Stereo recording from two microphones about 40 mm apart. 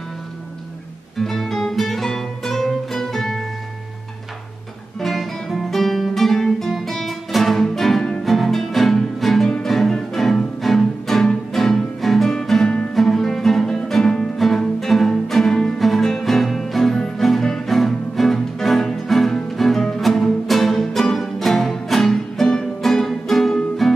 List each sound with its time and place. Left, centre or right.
1.1 s music: centre
5.0 s guitar: centre
7.7 s music: centre
12.3 s music: centre
12.9 s music: centre